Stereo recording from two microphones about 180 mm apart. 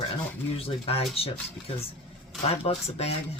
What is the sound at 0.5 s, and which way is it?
Speech, 35° left (ahead or behind).